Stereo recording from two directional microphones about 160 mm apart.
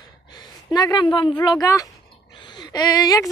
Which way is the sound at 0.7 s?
25° left (ahead or behind).